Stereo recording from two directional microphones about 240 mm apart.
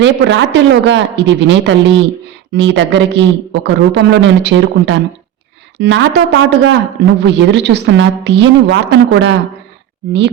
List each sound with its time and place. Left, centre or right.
0.0 s a man's voice: right